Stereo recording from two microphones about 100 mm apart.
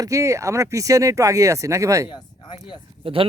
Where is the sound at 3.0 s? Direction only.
65° right (ahead or behind).